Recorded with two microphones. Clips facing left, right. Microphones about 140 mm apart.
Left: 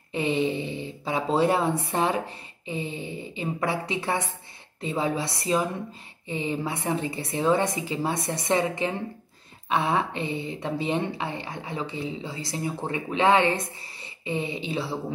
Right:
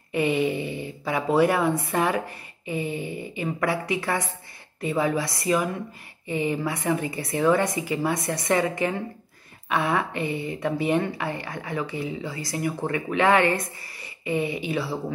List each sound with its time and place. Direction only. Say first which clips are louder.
0.1 s speech: right 2 dB; 25° left (ahead or behind)